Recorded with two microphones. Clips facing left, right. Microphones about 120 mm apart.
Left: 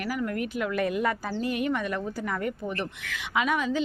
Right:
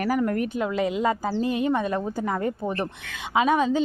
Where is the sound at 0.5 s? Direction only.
25° right (ahead or behind).